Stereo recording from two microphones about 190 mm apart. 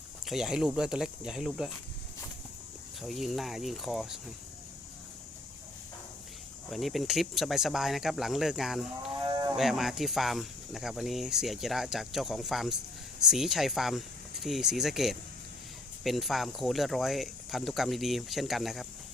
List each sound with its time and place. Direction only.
0.3 s speech: 5° right (ahead or behind)
3.0 s speech: centre (ahead or behind)
6.7 s speech: centre (ahead or behind)
9.2 s livestock: 20° right (ahead or behind)
9.6 s speech: centre (ahead or behind)